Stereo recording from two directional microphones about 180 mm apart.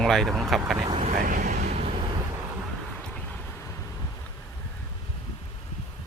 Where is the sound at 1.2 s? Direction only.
45° right (ahead or behind).